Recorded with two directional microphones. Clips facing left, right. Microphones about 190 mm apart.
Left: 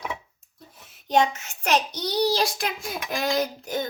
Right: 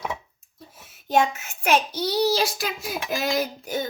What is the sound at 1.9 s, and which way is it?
A child's voice, 5° right (ahead or behind).